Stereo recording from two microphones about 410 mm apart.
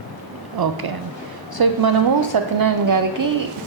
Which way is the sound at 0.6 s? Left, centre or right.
Right.